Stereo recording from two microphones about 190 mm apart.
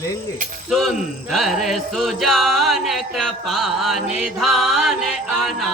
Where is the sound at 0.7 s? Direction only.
Centre (ahead or behind).